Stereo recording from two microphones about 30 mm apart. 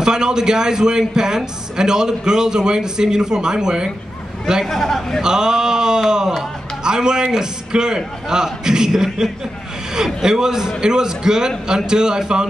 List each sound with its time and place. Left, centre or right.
0.0 s a man's voice: right
4.6 s speech: centre
5.2 s a man's voice: right